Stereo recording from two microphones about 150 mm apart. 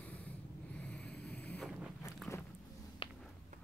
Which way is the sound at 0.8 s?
10° left (ahead or behind).